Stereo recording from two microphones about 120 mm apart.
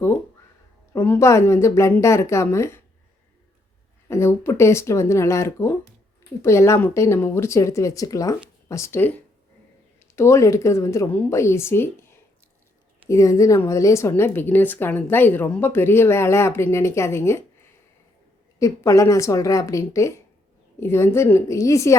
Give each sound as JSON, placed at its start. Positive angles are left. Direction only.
{"t": 0.9, "sound": "speech", "side_deg": 20}
{"t": 4.1, "sound": "speech", "side_deg": 20}
{"t": 18.6, "sound": "speech", "side_deg": 25}